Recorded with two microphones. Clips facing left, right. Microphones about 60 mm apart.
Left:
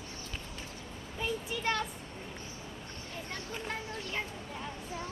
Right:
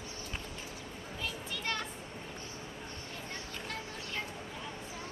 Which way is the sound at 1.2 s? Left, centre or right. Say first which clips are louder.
Left 6 dB; centre.